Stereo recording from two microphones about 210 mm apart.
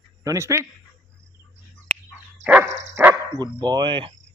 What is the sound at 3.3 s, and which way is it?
Speech, 20° right (ahead or behind).